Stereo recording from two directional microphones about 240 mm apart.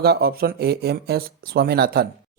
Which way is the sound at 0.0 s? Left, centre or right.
Right.